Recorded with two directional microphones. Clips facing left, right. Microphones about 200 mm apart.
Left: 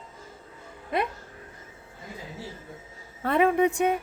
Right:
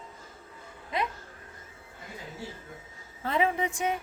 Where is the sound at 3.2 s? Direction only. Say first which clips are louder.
Left 6 dB; 60° left (ahead or behind).